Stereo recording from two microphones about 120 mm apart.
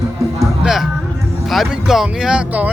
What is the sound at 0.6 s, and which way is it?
Speech, 5° right (ahead or behind).